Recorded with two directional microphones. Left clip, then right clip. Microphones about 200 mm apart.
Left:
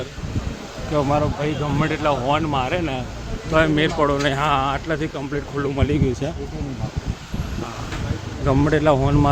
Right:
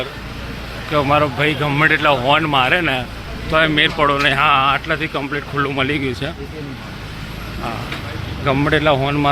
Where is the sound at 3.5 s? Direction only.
15° left (ahead or behind).